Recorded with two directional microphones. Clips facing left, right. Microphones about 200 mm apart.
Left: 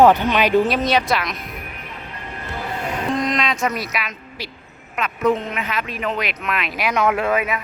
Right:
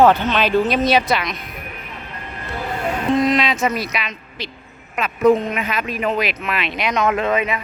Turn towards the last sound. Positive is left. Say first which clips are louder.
# right 1 dB
turn(degrees=5)  # may be behind; listen again after turning